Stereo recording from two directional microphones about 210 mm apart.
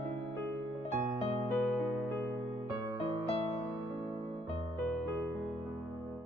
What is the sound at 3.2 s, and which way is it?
Music, 30° left (ahead or behind).